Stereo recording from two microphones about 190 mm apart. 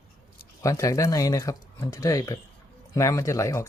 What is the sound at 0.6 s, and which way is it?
Speech, 15° left (ahead or behind).